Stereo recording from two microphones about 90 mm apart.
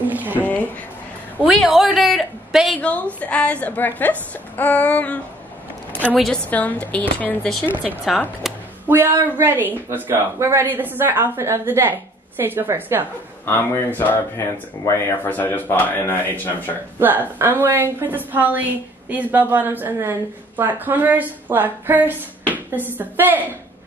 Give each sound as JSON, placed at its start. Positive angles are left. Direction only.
{"t": 0.0, "sound": "a sound", "side_deg": -20}
{"t": 0.4, "sound": "a sound", "side_deg": 20}
{"t": 1.6, "sound": "a man's voice", "side_deg": -5}
{"t": 2.8, "sound": "a woman's voice", "side_deg": 15}
{"t": 6.1, "sound": "a man's voice", "side_deg": 5}
{"t": 6.5, "sound": "a woman's voice", "side_deg": 20}
{"t": 7.8, "sound": "a man's voice", "side_deg": 0}
{"t": 8.8, "sound": "a woman's voice", "side_deg": -25}
{"t": 13.5, "sound": "speech", "side_deg": 25}
{"t": 17.0, "sound": "a woman's voice", "side_deg": -20}